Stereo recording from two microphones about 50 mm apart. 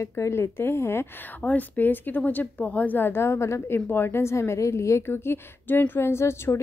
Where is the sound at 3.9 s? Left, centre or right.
Left.